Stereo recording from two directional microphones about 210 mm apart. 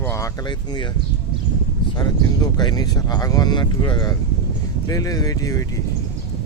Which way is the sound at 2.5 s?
20° left (ahead or behind).